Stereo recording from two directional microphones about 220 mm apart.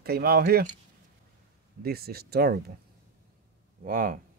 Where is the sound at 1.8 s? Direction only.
45° right (ahead or behind).